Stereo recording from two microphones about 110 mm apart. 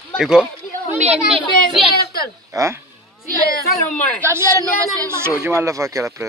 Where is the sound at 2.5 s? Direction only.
25° right (ahead or behind).